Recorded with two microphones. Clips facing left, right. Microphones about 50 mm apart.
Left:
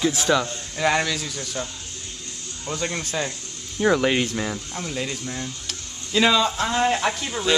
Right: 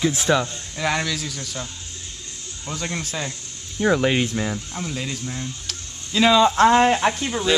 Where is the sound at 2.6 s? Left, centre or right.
Centre.